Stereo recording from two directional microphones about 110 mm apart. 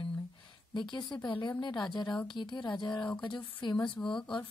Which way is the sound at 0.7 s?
45° left (ahead or behind).